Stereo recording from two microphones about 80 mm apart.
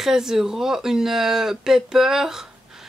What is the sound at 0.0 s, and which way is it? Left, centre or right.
Speech, centre.